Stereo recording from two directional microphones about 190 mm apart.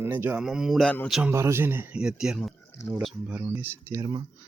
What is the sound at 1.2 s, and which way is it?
A man's voice, 15° right (ahead or behind).